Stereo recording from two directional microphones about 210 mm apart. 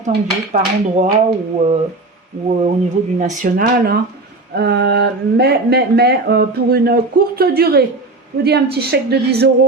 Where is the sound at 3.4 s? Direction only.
45° right (ahead or behind).